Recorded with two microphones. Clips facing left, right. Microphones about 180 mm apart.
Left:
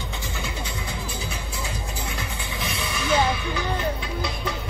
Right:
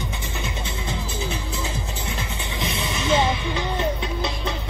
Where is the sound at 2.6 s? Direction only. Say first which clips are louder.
Right 3 dB; 20° right (ahead or behind).